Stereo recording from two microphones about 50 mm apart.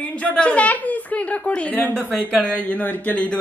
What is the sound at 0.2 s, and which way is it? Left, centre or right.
A woman's voice, left.